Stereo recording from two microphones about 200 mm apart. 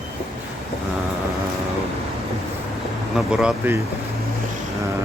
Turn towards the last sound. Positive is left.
turn(degrees=-5)  # may be behind; listen again after turning